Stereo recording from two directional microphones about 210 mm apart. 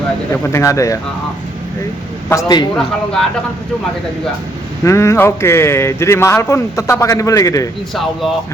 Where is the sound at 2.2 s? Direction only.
15° left (ahead or behind).